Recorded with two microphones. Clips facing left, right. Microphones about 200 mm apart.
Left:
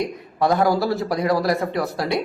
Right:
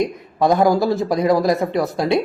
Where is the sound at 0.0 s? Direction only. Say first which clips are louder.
Right 3 dB; 20° right (ahead or behind).